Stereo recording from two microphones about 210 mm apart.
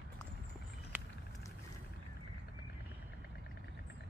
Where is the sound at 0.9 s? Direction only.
10° right (ahead or behind).